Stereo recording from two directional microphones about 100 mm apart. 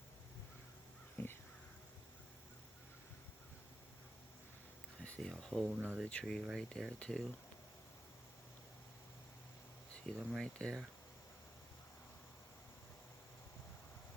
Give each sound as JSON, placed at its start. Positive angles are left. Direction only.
{"t": 1.2, "sound": "crow", "side_deg": 20}
{"t": 5.0, "sound": "a sound", "side_deg": 15}
{"t": 5.3, "sound": "speech", "side_deg": 5}
{"t": 5.7, "sound": "speech", "side_deg": -20}
{"t": 6.1, "sound": "speech", "side_deg": 10}
{"t": 10.2, "sound": "speech", "side_deg": -10}
{"t": 10.4, "sound": "speech", "side_deg": 10}